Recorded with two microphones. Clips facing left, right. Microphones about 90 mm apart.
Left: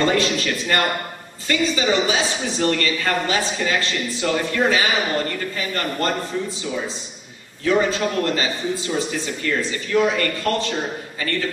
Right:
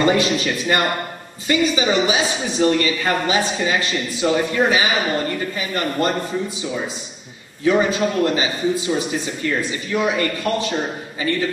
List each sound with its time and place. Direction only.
0.0 s a man's voice: 15° right (ahead or behind)
7.6 s a man's voice: 15° right (ahead or behind)